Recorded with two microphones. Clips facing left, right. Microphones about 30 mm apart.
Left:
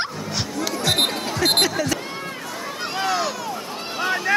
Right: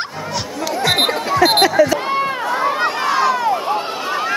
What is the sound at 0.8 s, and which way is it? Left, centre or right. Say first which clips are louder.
Chatter: right 5 dB; centre.